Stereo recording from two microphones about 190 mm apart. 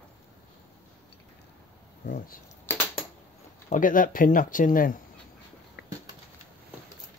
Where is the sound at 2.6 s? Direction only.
10° left (ahead or behind).